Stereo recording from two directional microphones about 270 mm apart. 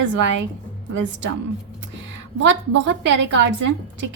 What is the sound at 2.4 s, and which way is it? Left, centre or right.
A woman's voice, right.